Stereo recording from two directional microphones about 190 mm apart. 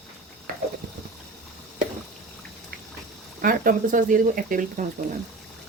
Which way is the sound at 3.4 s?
50° right (ahead or behind).